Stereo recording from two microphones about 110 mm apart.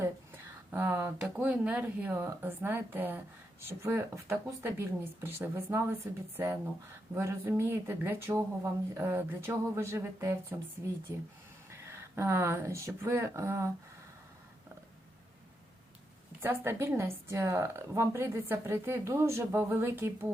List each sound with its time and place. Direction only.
0.7 s speech: 20° right (ahead or behind)
16.4 s speech: 20° right (ahead or behind)